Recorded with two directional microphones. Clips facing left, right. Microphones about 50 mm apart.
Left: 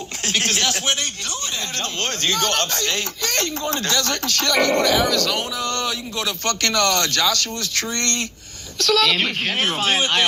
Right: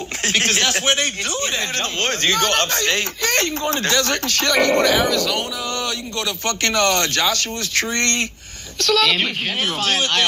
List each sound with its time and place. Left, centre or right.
0.2 s a sound: right
0.6 s speech: centre
1.0 s speech: right
5.0 s speech: centre
6.4 s speech: centre
8.8 s speech: centre